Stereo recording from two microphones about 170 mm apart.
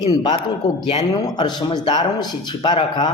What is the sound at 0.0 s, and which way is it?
Speech, 25° left (ahead or behind).